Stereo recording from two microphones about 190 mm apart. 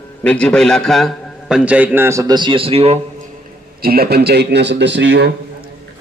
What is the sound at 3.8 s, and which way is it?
A man's voice, 50° right (ahead or behind).